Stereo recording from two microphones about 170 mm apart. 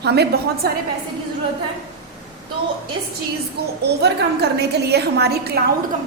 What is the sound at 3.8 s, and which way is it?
A woman's voice, 75° right (ahead or behind).